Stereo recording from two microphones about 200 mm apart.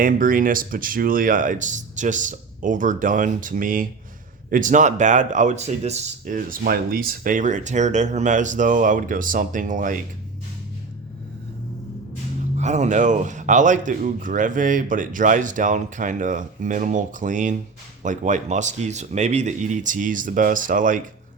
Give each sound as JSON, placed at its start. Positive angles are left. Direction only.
{"t": 0.0, "sound": "speech", "side_deg": -45}
{"t": 12.5, "sound": "speech", "side_deg": -35}